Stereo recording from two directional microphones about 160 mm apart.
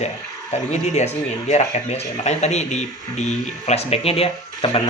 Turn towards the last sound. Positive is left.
turn(degrees=35)  # may be behind; listen again after turning